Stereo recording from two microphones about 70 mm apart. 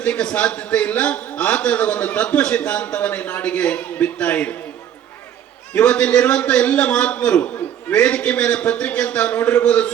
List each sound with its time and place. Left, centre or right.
0.0 s a man's voice: centre
5.7 s a man's voice: centre